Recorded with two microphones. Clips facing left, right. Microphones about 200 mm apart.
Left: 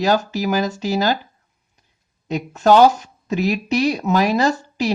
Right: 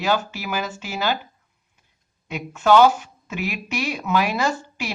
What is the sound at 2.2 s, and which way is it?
Speech, 40° left (ahead or behind).